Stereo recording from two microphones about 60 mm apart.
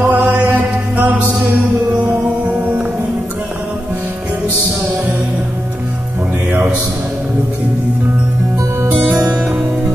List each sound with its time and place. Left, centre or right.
0.0 s chant: right
2.0 s music: right